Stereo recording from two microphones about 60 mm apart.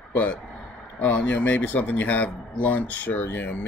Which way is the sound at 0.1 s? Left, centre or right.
Left.